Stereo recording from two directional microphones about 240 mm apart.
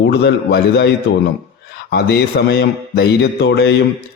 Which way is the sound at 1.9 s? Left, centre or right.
Left.